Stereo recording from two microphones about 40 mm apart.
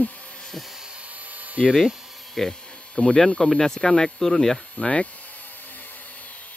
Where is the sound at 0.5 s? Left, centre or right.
Centre.